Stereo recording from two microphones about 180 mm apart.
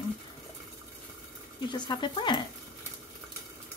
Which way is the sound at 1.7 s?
25° left (ahead or behind).